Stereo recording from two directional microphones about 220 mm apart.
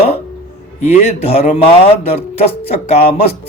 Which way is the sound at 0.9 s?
30° left (ahead or behind).